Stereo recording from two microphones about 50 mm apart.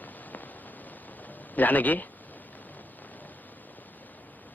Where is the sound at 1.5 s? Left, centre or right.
Left.